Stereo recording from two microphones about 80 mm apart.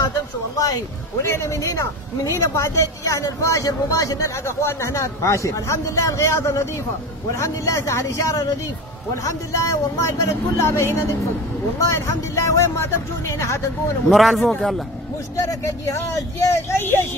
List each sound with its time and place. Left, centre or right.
1.2 s a man's voice: left
14.0 s speech: centre
15.3 s a man's voice: left